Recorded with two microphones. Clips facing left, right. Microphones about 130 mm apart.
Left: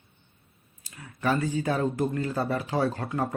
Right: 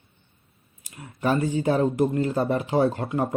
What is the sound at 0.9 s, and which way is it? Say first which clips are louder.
Speech: right 3 dB; 25° right (ahead or behind).